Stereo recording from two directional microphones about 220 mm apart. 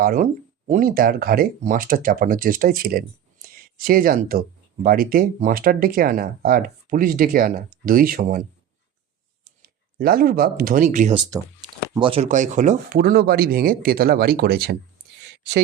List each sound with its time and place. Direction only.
0.0 s speech: 40° right (ahead or behind)
9.4 s speech: 45° right (ahead or behind)